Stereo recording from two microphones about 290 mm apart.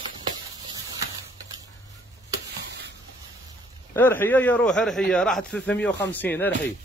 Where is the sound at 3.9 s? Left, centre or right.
Centre.